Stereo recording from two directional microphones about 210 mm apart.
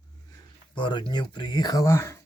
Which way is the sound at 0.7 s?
20° left (ahead or behind).